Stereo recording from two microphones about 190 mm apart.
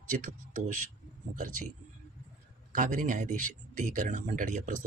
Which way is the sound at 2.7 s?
45° right (ahead or behind).